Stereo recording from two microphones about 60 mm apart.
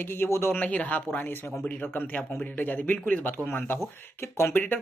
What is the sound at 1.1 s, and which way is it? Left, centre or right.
Speech, left.